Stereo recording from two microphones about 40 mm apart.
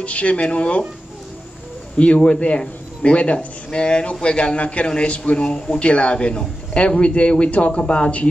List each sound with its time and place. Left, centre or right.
0.0 s speech: left
2.0 s a man's voice: left